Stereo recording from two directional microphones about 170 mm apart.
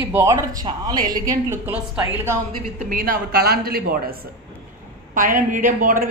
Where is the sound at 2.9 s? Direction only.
55° right (ahead or behind).